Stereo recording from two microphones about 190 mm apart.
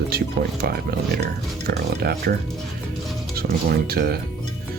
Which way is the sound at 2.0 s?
55° right (ahead or behind).